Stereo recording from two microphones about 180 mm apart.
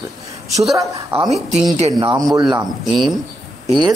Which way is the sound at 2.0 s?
20° right (ahead or behind).